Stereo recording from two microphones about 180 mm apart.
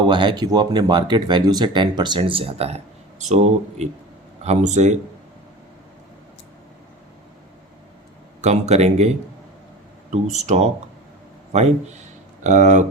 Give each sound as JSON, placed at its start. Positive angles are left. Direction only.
{"t": 0.1, "sound": "speech", "side_deg": -25}
{"t": 8.4, "sound": "speech", "side_deg": -35}